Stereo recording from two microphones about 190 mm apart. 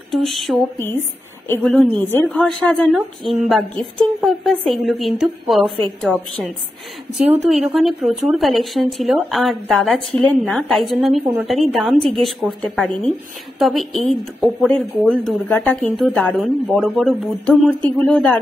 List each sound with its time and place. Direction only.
0.1 s a woman's voice: centre (ahead or behind)
0.7 s speech: 10° left (ahead or behind)
1.6 s a woman's voice: centre (ahead or behind)
5.6 s a woman's voice: 30° right (ahead or behind)
5.9 s a woman's voice: 5° left (ahead or behind)